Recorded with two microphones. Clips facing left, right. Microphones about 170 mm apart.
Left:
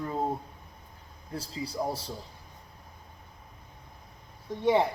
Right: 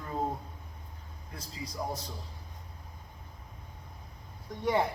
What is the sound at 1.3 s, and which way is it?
Speech, 30° left (ahead or behind).